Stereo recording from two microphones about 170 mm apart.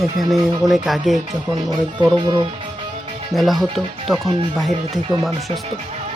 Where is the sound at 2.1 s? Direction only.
20° right (ahead or behind).